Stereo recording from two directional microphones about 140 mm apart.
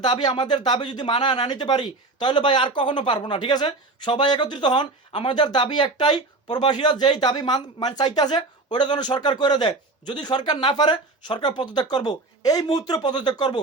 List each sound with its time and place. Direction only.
0.0 s speech: 30° left (ahead or behind)